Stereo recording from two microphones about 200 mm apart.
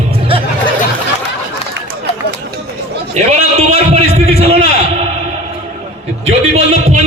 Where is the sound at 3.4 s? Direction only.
30° right (ahead or behind).